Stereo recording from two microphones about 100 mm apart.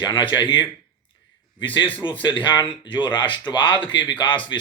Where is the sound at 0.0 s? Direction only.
50° left (ahead or behind).